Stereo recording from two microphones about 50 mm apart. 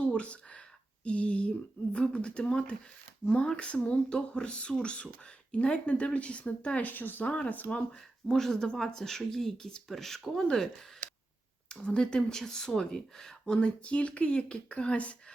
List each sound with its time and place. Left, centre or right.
0.0 s a sound: left
1.0 s speech: left
7.3 s speech: left
8.3 s speech: centre
11.7 s speech: left